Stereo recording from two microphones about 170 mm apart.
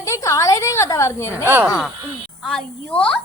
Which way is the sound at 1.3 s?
10° right (ahead or behind).